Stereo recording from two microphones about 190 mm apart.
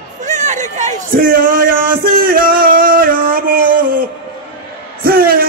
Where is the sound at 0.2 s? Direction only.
40° right (ahead or behind).